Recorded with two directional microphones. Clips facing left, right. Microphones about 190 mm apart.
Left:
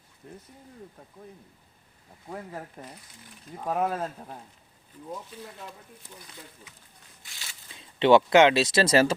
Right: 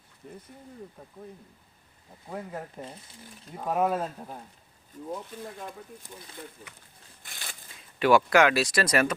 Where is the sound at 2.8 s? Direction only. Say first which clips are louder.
Right 3 dB; centre (ahead or behind).